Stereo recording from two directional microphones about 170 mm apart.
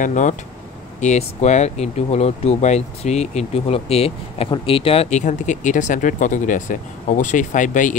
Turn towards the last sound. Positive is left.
turn(degrees=50)  # may be behind; listen again after turning